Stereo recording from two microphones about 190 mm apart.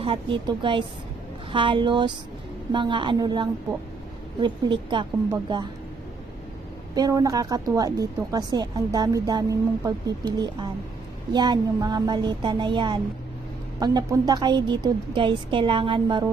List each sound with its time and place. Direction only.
0.0 s speech: 25° right (ahead or behind)
7.0 s speech: 20° right (ahead or behind)